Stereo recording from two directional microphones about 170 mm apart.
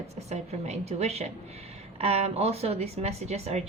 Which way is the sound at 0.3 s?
40° right (ahead or behind).